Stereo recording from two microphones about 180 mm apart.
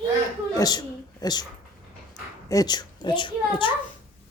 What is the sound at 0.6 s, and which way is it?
Speech, 20° left (ahead or behind).